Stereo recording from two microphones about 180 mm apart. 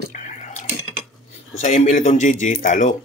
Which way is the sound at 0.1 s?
45° left (ahead or behind).